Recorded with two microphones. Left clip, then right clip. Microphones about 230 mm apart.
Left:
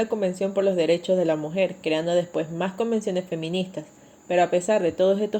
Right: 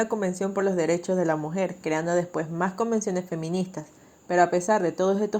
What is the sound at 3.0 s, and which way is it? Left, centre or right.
Speech, right.